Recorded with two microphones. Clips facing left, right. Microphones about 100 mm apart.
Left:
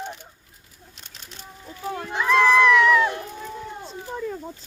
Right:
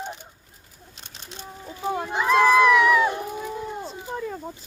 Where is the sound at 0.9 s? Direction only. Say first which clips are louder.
Right 3 dB; 30° right (ahead or behind).